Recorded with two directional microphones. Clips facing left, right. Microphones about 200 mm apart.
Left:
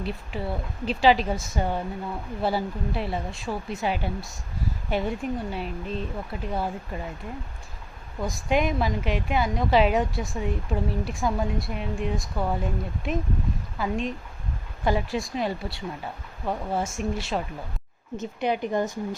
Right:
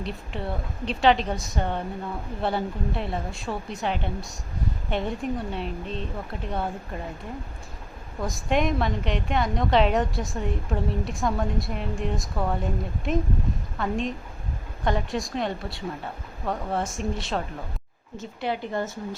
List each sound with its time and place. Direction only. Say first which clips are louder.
0.0 s a woman's voice: left 1 dB; 5° left (ahead or behind)
8.2 s a woman's voice: even; centre (ahead or behind)
18.2 s a woman's voice: left 3 dB; 15° left (ahead or behind)